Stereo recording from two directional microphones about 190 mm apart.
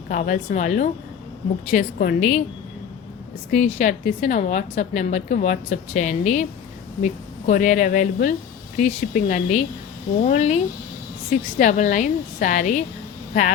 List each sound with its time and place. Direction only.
0.1 s a woman's voice: 40° left (ahead or behind)
3.5 s a woman's voice: 40° left (ahead or behind)